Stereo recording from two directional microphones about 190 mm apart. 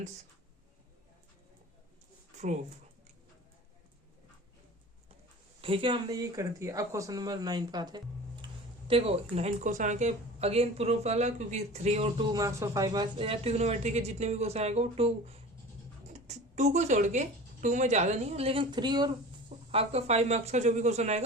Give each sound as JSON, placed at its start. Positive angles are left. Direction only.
{"t": 5.6, "sound": "speech", "side_deg": -25}
{"t": 12.3, "sound": "speech", "side_deg": -15}
{"t": 19.7, "sound": "speech", "side_deg": -35}